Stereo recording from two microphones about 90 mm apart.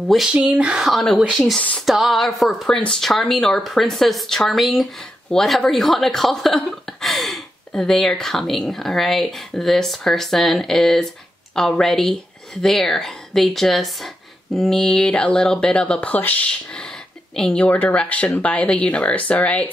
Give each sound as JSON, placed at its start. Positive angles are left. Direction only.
{"t": 0.3, "sound": "speech", "side_deg": -15}
{"t": 1.2, "sound": "speech", "side_deg": -10}
{"t": 1.8, "sound": "speech", "side_deg": 0}
{"t": 17.6, "sound": "speech", "side_deg": 20}